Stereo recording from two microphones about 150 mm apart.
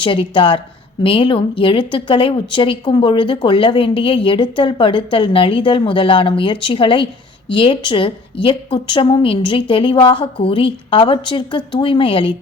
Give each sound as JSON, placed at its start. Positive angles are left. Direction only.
{"t": 0.0, "sound": "speech", "side_deg": 35}